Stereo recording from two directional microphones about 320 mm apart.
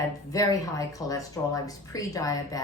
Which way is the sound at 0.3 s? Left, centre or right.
Centre.